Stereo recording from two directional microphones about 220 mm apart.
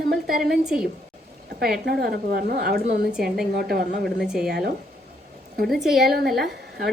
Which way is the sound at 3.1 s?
Centre (ahead or behind).